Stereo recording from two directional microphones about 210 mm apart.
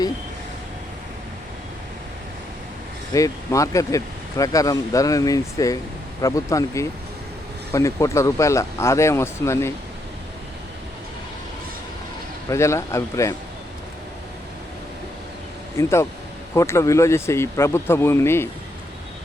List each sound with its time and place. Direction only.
3.1 s speech: 15° left (ahead or behind)
12.5 s speech: 15° left (ahead or behind)
15.8 s speech: 10° left (ahead or behind)